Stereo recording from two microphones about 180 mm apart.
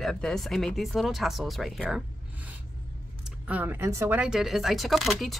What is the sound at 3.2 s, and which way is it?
A woman's voice, 10° right (ahead or behind).